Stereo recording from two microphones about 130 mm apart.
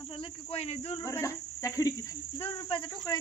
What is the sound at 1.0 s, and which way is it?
Speech, 20° left (ahead or behind).